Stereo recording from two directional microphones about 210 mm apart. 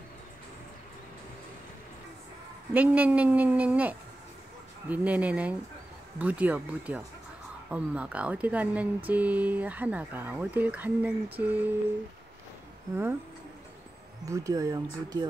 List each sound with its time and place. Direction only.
2.7 s speech: 5° right (ahead or behind)
14.2 s speech: 15° right (ahead or behind)